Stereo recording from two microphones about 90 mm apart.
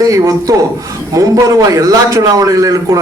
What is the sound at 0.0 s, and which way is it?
A man's voice, 40° right (ahead or behind).